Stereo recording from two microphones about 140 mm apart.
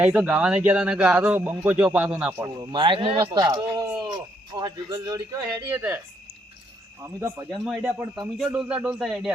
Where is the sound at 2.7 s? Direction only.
35° right (ahead or behind); by 6.0 s 20° right (ahead or behind).